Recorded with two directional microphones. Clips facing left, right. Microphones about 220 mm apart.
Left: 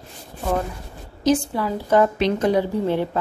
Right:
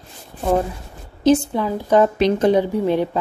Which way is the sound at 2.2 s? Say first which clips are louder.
Right 4 dB; 40° right (ahead or behind).